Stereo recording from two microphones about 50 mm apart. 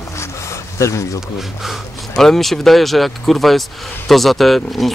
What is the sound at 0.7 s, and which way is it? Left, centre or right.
Speech, left.